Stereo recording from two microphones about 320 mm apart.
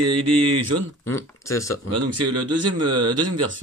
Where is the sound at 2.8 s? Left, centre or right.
Right.